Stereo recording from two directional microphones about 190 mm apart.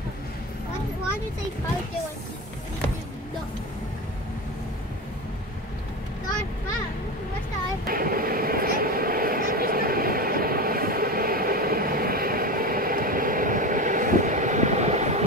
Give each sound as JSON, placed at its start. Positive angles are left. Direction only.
{"t": 7.8, "sound": "vehicle", "side_deg": -50}